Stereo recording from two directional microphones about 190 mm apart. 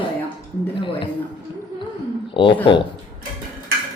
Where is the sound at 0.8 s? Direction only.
25° left (ahead or behind).